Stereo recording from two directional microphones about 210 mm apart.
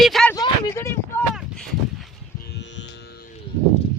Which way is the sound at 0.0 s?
Centre (ahead or behind).